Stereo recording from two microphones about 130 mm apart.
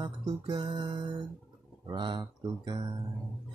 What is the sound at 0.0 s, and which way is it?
Music, 35° right (ahead or behind).